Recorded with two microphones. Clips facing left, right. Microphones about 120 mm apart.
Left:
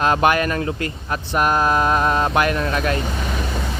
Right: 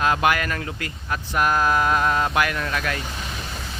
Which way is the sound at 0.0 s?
35° left (ahead or behind).